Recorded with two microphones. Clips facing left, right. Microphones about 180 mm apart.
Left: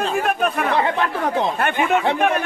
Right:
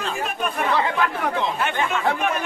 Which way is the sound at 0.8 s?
35° left (ahead or behind).